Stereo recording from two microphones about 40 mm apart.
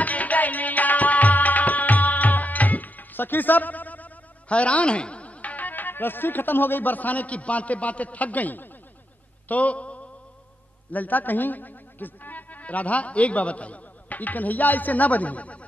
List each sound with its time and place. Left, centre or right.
0.0 s music: left
9.5 s a man's voice: left
10.9 s speech: left